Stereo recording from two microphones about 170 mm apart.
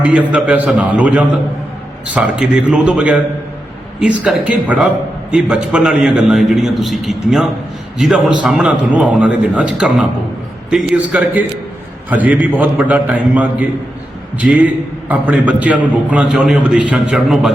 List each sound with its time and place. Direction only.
0.0 s a man's voice: 5° right (ahead or behind)